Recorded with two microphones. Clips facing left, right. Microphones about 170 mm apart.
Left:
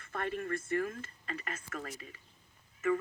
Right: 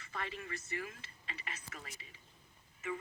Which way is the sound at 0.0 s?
50° left (ahead or behind).